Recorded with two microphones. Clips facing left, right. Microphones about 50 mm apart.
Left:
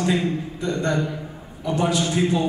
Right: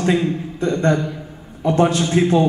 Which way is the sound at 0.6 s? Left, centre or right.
Right.